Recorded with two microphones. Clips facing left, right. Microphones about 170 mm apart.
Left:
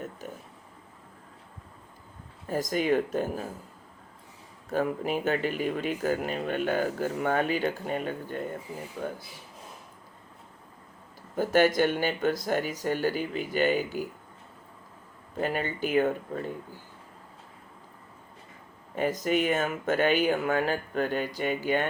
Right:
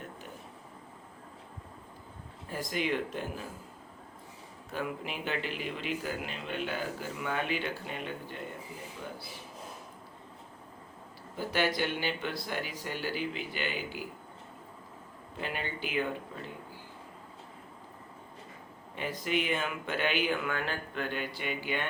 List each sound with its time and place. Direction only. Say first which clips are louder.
2.5 s speech: left 7 dB; 45° left (ahead or behind)
4.7 s speech: left 9 dB; 45° left (ahead or behind)
11.3 s speech: left 8 dB; 45° left (ahead or behind)
15.4 s speech: left 8 dB; 45° left (ahead or behind)
18.9 s speech: left 6 dB; 45° left (ahead or behind)